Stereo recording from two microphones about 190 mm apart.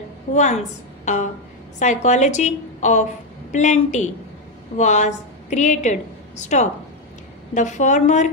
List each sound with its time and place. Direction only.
0.3 s a woman's voice: 40° left (ahead or behind)